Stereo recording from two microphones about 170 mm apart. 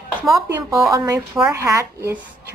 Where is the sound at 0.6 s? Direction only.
20° right (ahead or behind).